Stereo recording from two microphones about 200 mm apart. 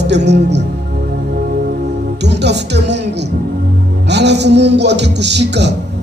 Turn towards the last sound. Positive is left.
turn(degrees=-60)  # may be behind; listen again after turning